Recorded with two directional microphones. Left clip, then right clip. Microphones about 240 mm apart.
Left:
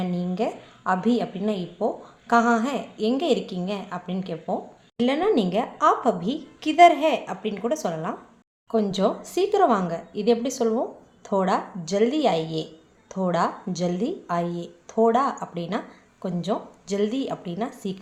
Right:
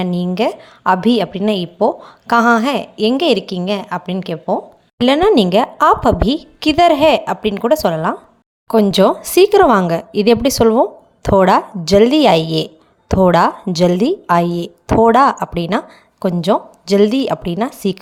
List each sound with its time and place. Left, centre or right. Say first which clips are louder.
0.0 s a woman's voice: right 10 dB; right